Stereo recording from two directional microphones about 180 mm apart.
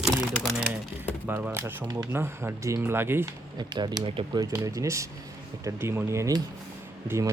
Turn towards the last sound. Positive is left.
turn(degrees=-15)  # may be behind; listen again after turning